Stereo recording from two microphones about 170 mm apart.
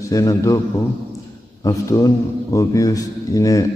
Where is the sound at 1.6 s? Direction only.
20° left (ahead or behind).